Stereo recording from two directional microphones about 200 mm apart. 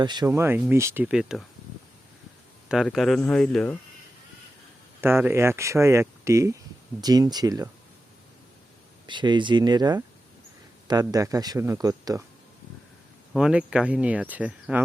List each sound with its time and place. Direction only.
0.0 s speech: 20° right (ahead or behind); by 1.5 s centre (ahead or behind)
2.6 s speech: centre (ahead or behind)
4.9 s speech: 10° right (ahead or behind)
9.0 s speech: 25° right (ahead or behind)
13.3 s speech: 5° right (ahead or behind)